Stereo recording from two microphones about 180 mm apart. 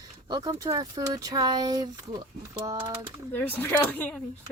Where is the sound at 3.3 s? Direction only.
10° left (ahead or behind).